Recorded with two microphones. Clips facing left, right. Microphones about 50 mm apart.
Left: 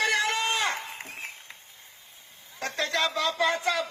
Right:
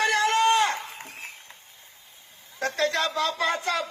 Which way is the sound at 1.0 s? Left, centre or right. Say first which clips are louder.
Left 1 dB; left.